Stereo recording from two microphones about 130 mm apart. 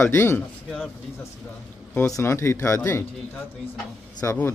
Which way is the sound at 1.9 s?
25° left (ahead or behind).